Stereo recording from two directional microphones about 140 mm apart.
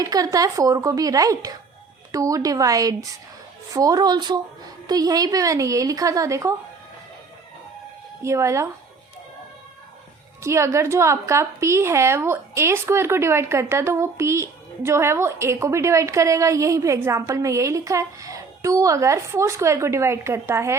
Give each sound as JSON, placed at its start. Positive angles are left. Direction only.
{"t": 0.0, "sound": "a woman's voice", "side_deg": -25}
{"t": 8.2, "sound": "a woman's voice", "side_deg": -20}
{"t": 10.4, "sound": "a woman's voice", "side_deg": -20}